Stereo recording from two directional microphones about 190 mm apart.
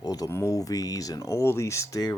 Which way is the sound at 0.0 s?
20° left (ahead or behind).